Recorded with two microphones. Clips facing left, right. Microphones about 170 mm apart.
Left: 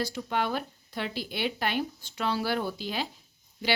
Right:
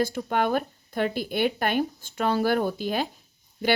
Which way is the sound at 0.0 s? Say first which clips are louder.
Right 5 dB; 50° right (ahead or behind).